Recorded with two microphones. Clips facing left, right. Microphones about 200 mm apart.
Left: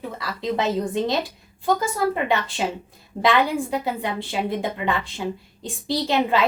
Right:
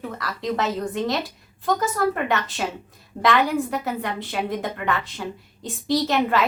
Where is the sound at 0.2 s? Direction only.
15° left (ahead or behind).